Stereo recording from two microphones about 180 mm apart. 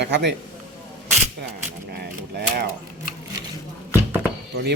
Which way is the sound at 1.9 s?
65° right (ahead or behind).